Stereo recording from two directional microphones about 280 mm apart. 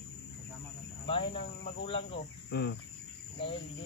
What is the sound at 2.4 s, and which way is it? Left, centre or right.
Cricket, left.